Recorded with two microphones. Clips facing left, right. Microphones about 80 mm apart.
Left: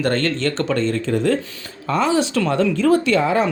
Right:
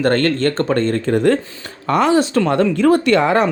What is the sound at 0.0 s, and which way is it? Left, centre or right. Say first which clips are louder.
Speech: right 4 dB; right.